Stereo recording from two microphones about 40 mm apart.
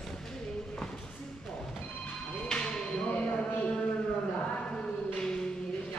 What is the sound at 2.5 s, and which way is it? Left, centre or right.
Music, left.